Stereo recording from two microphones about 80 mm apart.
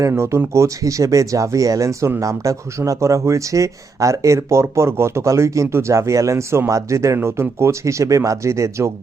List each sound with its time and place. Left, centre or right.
0.1 s speech: right